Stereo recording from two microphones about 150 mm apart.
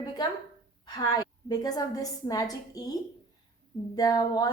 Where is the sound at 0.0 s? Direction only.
25° left (ahead or behind).